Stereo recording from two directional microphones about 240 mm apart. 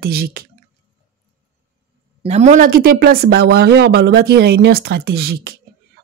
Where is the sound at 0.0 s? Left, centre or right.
Right.